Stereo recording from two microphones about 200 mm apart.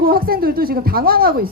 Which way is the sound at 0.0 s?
50° right (ahead or behind).